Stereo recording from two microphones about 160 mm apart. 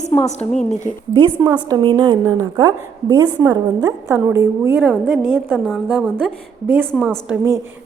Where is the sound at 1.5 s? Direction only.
30° right (ahead or behind).